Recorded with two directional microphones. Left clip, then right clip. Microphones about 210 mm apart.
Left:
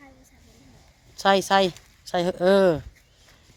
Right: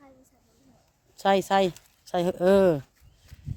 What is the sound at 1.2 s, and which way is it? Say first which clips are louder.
Speech: left 3 dB; 10° right (ahead or behind).